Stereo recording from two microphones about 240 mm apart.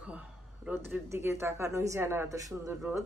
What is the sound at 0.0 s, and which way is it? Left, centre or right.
Speech, centre.